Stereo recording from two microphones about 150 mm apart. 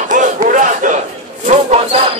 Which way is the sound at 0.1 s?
60° right (ahead or behind).